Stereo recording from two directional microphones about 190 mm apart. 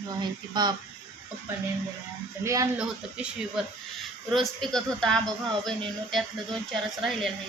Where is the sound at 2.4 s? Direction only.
15° right (ahead or behind).